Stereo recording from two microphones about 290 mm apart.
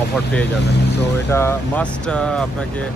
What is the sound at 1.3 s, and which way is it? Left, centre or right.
Speech, centre.